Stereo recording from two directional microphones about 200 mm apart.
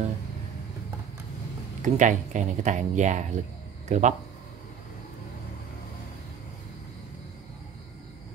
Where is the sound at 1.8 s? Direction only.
35° right (ahead or behind).